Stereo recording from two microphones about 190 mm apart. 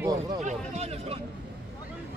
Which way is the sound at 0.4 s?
35° right (ahead or behind).